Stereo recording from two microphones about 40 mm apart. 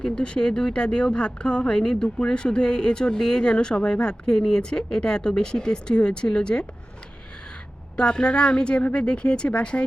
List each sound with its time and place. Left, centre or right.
0.0 s speech: left
7.9 s speech: left